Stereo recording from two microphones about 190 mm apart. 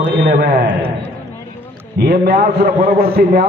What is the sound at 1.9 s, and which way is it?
A man's voice, 55° right (ahead or behind).